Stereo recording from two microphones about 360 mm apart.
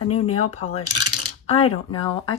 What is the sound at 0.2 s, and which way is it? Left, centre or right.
Speech, centre.